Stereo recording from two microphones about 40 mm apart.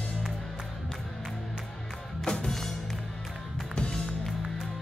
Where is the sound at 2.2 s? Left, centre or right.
Centre.